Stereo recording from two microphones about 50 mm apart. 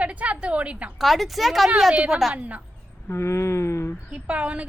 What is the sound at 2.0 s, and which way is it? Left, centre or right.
Speech, centre.